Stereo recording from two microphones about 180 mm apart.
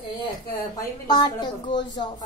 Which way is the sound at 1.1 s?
25° left (ahead or behind).